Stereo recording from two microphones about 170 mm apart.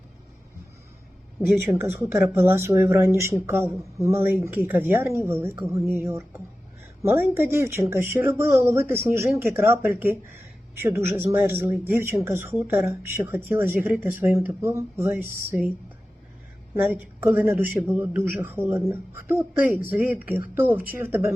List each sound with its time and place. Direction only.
1.5 s speech: 15° right (ahead or behind)
16.7 s speech: 10° right (ahead or behind)